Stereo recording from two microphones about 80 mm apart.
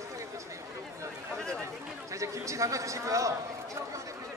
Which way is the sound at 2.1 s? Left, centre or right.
Right.